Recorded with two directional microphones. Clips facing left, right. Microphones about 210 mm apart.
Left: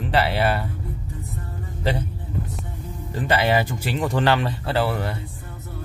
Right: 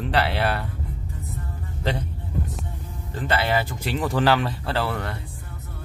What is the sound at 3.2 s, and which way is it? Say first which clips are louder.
Speech: left 3 dB; 15° left (ahead or behind).